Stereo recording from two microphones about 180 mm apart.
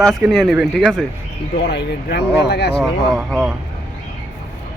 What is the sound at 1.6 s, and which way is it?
Speech, 65° left (ahead or behind).